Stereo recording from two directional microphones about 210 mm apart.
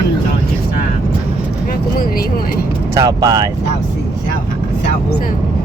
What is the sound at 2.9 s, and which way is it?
Speech, 15° right (ahead or behind).